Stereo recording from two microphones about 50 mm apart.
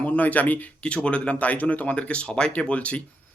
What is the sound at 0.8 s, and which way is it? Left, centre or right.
Speech, left.